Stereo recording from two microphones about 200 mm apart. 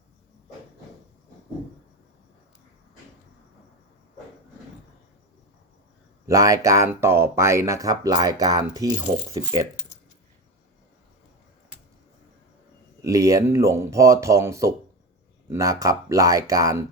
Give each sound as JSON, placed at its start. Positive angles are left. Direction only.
{"t": 6.2, "sound": "speech", "side_deg": -15}
{"t": 13.0, "sound": "speech", "side_deg": -15}